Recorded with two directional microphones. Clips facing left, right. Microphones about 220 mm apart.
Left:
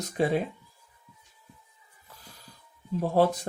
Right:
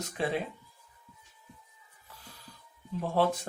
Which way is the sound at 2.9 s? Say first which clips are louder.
Left 5 dB; 40° left (ahead or behind).